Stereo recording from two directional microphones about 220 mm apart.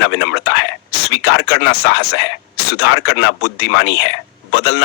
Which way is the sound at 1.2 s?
50° left (ahead or behind).